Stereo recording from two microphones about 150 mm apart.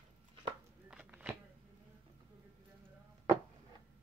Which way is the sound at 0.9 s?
10° right (ahead or behind).